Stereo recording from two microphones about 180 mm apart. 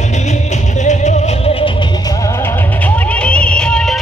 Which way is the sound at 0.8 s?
35° left (ahead or behind).